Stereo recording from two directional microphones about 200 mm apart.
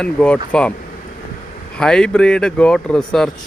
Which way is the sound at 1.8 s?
5° left (ahead or behind).